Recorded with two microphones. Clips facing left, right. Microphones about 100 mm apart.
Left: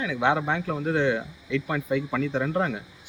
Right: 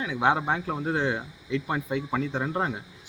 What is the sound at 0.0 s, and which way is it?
Speech, 25° right (ahead or behind).